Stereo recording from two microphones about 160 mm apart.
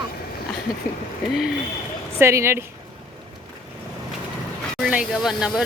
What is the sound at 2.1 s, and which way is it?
Speech, 15° right (ahead or behind).